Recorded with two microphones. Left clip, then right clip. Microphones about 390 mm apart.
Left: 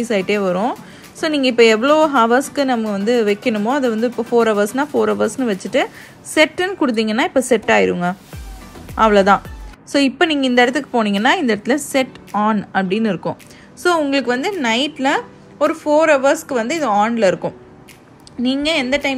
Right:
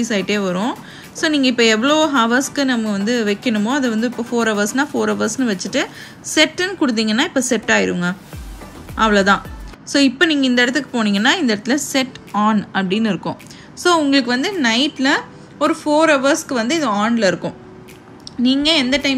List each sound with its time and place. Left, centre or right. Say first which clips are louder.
0.0 s a woman's voice: left 2 dB; centre